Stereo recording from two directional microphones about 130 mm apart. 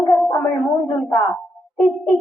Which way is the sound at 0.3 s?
10° left (ahead or behind).